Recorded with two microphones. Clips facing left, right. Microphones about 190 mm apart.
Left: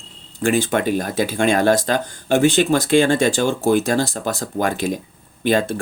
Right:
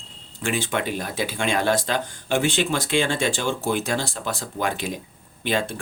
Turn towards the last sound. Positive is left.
turn(degrees=45)  # may be behind; listen again after turning